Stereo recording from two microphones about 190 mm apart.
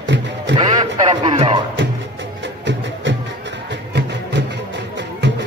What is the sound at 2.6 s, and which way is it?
Music, 75° right (ahead or behind).